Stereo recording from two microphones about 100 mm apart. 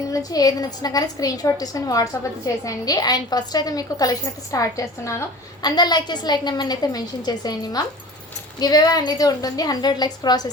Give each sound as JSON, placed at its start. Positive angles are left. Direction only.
{"t": 0.1, "sound": "a woman's voice", "side_deg": 40}
{"t": 5.6, "sound": "a woman's voice", "side_deg": 45}